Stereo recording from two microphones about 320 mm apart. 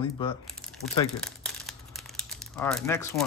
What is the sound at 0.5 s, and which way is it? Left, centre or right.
Crumpling, centre.